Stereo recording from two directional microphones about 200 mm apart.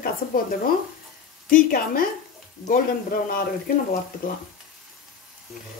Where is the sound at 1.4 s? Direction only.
45° left (ahead or behind).